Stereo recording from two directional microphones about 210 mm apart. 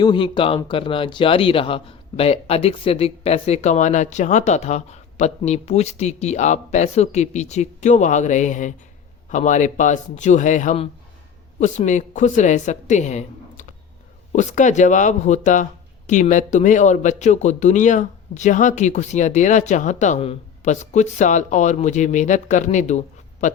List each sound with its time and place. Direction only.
0.0 s a man's voice: 25° left (ahead or behind)